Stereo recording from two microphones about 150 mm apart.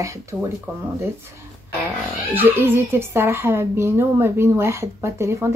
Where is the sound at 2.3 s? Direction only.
15° right (ahead or behind).